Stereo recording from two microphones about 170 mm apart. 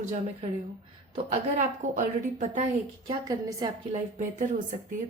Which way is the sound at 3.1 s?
20° right (ahead or behind).